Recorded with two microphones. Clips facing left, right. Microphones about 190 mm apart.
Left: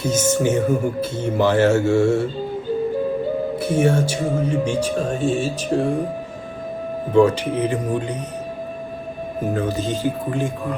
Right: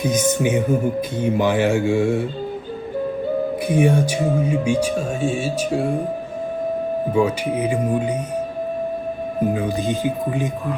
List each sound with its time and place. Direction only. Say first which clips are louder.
0.0 s speech: even; 15° right (ahead or behind)
3.7 s speech: right 1 dB; 15° right (ahead or behind)
7.1 s speech: left 5 dB; 10° right (ahead or behind)
9.5 s speech: left 3 dB; 15° right (ahead or behind)